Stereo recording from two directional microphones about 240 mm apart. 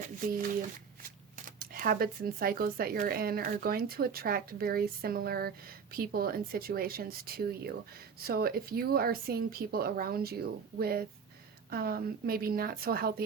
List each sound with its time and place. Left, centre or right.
1.4 s speech: right